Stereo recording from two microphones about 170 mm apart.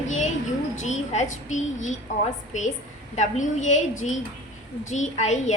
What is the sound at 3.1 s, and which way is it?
A woman's voice, 45° left (ahead or behind).